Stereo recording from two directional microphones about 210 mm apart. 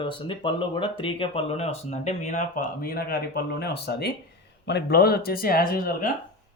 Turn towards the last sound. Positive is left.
turn(degrees=45)  # may be behind; listen again after turning